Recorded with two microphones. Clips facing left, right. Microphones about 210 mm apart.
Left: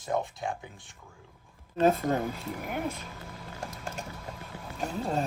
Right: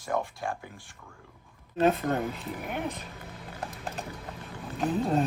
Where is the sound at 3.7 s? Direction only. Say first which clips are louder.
Right 1 dB; 35° right (ahead or behind).